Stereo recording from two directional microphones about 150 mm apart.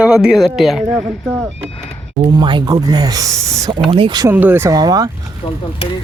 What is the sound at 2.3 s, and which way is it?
Speech, 30° right (ahead or behind).